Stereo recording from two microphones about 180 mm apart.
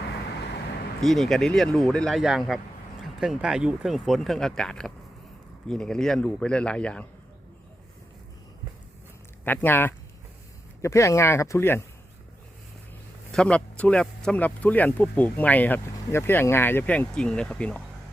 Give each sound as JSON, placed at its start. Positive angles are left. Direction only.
{"t": 1.0, "sound": "speech", "side_deg": 0}
{"t": 9.4, "sound": "speech", "side_deg": 10}
{"t": 13.3, "sound": "speech", "side_deg": 5}